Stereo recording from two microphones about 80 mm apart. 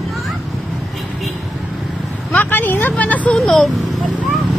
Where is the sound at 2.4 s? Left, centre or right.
Left.